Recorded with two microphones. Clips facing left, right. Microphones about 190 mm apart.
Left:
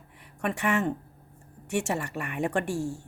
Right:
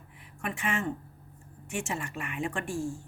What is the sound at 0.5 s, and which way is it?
Speech, 65° left (ahead or behind).